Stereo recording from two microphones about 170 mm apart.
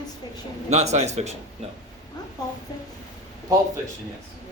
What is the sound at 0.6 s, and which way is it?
Speech, 40° right (ahead or behind).